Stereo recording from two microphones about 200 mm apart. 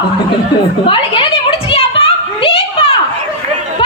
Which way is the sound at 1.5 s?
30° left (ahead or behind).